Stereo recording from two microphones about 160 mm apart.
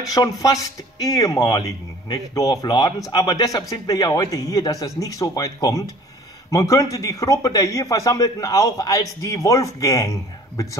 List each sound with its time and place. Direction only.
0.1 s speech: 20° left (ahead or behind)